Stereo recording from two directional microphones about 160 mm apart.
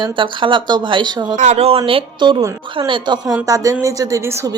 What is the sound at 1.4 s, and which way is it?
A woman's voice, 45° right (ahead or behind).